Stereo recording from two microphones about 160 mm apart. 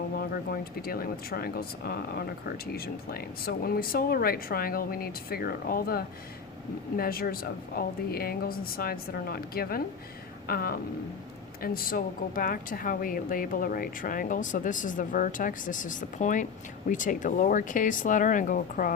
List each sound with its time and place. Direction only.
0.2 s speech: 70° left (ahead or behind)